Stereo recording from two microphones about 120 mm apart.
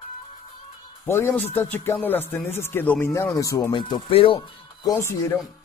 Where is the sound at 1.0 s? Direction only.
20° left (ahead or behind).